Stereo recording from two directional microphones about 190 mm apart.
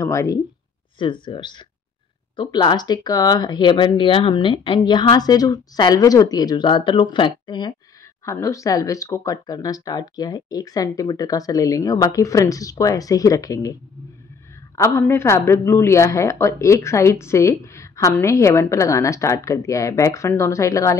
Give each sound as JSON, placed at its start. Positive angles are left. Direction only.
{"t": 0.0, "sound": "speech", "side_deg": 15}
{"t": 0.9, "sound": "speech", "side_deg": 25}
{"t": 14.8, "sound": "speech", "side_deg": 10}